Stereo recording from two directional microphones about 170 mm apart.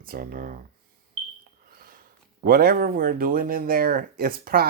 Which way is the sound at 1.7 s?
55° right (ahead or behind).